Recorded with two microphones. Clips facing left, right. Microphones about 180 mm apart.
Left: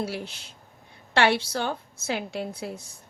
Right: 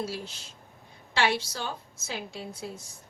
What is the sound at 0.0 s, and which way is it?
A woman's voice, 60° left (ahead or behind).